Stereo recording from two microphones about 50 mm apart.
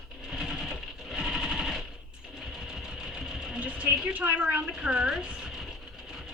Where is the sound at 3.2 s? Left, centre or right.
Centre.